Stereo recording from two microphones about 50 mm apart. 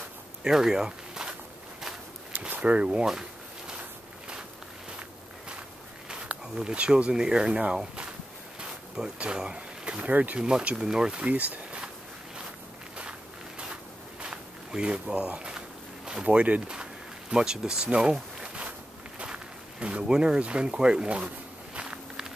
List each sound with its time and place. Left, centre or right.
0.4 s a sound: centre
2.6 s a sound: right
6.0 s speech: centre
10.8 s speech: centre
11.2 s speech: right
14.2 s walk: centre
16.3 s speech: right
21.7 s walk: centre